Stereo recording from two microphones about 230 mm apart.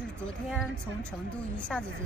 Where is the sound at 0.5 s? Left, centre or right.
Centre.